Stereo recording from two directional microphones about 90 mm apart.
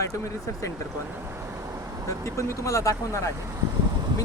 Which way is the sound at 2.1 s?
35° left (ahead or behind).